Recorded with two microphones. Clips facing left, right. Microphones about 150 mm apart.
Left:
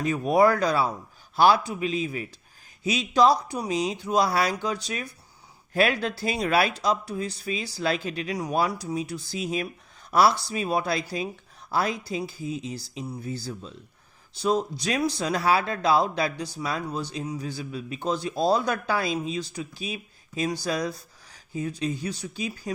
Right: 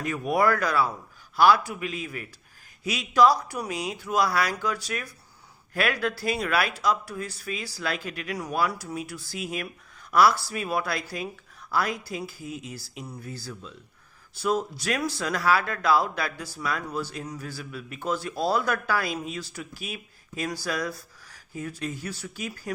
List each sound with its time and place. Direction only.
0.0 s speech: 25° left (ahead or behind)